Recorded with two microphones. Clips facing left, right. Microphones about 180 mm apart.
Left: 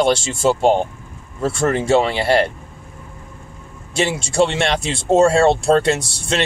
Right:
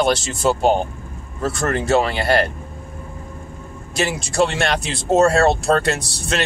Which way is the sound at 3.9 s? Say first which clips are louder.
Left 2 dB; 30° left (ahead or behind).